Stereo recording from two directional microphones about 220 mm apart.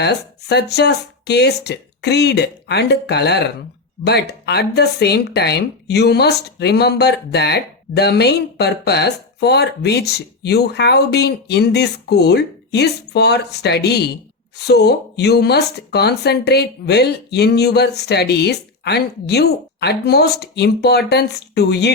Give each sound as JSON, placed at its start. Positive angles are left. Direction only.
{"t": 0.0, "sound": "speech", "side_deg": 50}